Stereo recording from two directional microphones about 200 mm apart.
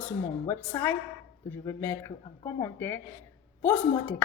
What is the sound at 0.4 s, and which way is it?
A woman's voice, 10° left (ahead or behind).